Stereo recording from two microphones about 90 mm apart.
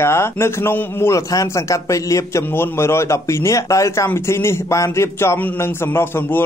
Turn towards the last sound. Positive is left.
turn(degrees=25)  # may be behind; listen again after turning